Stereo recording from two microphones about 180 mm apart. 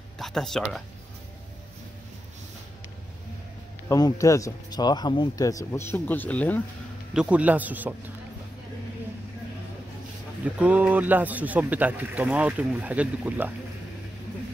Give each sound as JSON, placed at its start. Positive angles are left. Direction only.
{"t": 0.2, "sound": "speech", "side_deg": 0}
{"t": 3.9, "sound": "speech", "side_deg": 15}
{"t": 7.2, "sound": "a man's voice", "side_deg": -5}
{"t": 10.4, "sound": "a man's voice", "side_deg": -10}